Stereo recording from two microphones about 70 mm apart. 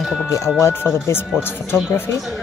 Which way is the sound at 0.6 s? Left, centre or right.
Left.